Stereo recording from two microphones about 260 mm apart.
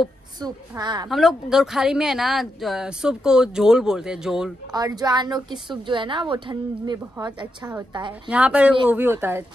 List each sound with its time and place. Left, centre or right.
0.4 s a woman's voice: centre
1.0 s speech: centre
4.7 s a woman's voice: centre
8.3 s a woman's voice: centre